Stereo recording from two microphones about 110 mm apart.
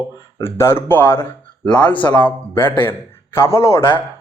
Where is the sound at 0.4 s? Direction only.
20° left (ahead or behind).